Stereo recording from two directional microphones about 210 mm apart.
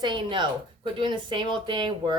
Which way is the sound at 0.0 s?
20° right (ahead or behind).